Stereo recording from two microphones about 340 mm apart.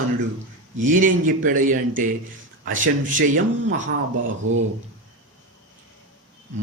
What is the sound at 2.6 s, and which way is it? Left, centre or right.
Speech, right.